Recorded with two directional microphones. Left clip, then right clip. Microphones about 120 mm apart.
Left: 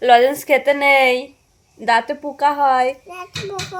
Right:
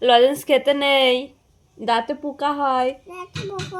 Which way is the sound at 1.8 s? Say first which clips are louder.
Left 4 dB; 35° left (ahead or behind).